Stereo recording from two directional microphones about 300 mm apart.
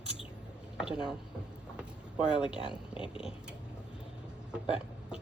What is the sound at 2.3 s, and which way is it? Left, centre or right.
Speech, centre.